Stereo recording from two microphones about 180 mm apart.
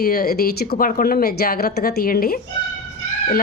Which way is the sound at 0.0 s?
55° left (ahead or behind).